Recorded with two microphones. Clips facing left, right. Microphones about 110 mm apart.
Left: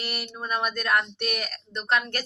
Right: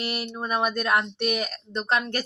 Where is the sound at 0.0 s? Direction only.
20° right (ahead or behind).